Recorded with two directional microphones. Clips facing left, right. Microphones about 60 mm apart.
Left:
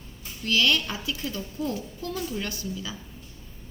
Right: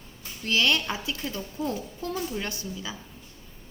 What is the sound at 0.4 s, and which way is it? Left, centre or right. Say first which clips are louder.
A woman's voice: left 1 dB; right.